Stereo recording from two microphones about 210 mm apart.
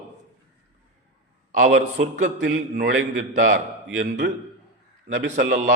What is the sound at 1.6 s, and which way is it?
A man's voice, 70° right (ahead or behind).